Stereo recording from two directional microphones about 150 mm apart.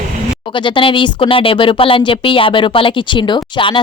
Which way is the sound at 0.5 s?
35° left (ahead or behind).